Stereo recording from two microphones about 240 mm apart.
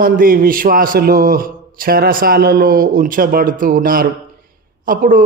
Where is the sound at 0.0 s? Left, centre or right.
Right.